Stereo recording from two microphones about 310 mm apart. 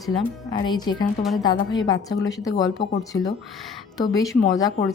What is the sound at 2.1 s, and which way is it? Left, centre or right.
A woman's voice, left.